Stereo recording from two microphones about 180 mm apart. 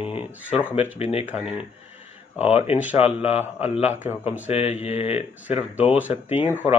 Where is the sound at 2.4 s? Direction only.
40° left (ahead or behind).